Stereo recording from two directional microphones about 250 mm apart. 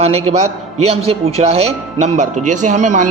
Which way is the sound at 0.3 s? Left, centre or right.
Right.